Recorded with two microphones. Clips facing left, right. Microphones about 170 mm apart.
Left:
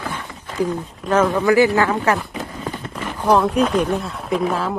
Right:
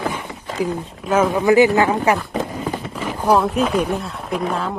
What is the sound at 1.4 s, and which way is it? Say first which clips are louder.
Speech: right 2 dB; 20° right (ahead or behind).